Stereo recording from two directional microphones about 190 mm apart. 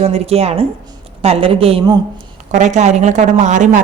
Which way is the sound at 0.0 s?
35° right (ahead or behind).